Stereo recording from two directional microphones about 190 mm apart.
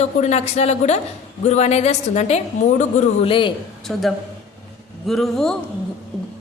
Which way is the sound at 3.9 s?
Centre (ahead or behind).